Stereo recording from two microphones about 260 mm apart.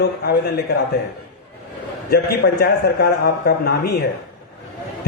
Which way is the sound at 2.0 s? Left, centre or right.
Left.